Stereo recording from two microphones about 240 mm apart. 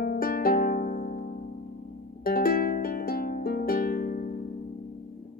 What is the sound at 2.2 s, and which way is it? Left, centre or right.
Music, left.